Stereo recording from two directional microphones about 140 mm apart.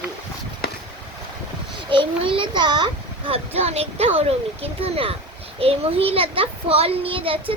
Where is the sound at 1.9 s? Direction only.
35° right (ahead or behind).